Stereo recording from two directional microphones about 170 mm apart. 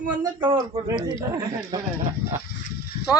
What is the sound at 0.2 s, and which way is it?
Speech, 25° right (ahead or behind).